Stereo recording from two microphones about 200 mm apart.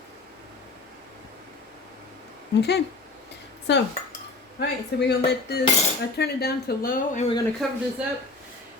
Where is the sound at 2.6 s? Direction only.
55° left (ahead or behind).